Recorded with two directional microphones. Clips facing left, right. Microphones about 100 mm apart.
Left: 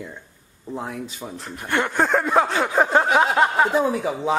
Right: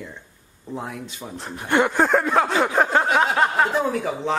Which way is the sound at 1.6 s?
15° right (ahead or behind).